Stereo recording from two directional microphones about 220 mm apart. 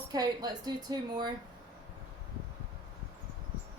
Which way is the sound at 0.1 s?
15° right (ahead or behind).